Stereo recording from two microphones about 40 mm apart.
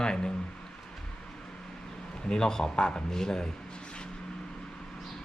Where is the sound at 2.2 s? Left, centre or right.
Centre.